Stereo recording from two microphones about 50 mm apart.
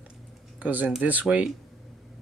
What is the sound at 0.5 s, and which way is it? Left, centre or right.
Speech, right.